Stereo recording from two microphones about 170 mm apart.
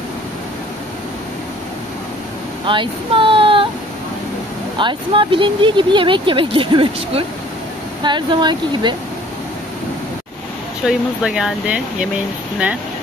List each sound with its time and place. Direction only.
2.6 s speech: 30° right (ahead or behind)
4.7 s speech: 30° right (ahead or behind)
10.9 s speech: 5° right (ahead or behind)